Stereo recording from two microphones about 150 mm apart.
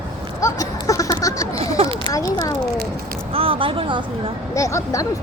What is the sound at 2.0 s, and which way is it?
Speech, 25° left (ahead or behind).